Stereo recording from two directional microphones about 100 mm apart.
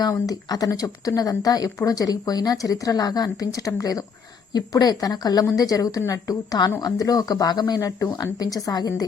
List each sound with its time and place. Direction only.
0.0 s speech: 40° left (ahead or behind)